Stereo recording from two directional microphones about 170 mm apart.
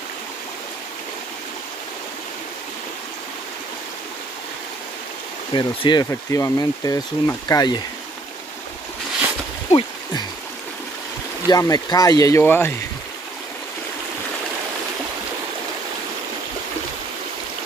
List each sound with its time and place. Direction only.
5.5 s speech: 25° left (ahead or behind)
9.7 s a sound: 30° left (ahead or behind)
11.4 s speech: 20° left (ahead or behind)